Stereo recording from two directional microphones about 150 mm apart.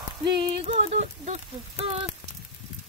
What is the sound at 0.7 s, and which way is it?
Speech, 50° right (ahead or behind).